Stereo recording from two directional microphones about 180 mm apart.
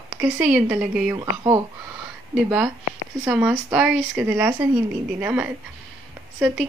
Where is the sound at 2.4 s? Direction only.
10° right (ahead or behind).